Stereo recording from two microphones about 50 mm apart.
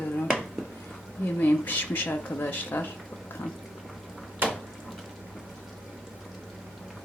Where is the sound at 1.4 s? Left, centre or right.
Left.